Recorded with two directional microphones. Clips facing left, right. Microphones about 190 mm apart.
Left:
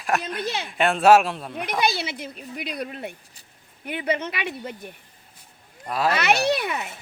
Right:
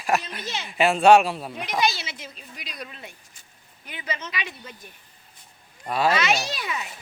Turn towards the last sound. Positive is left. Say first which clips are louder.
# left 8 dB
turn(degrees=60)  # may be behind; listen again after turning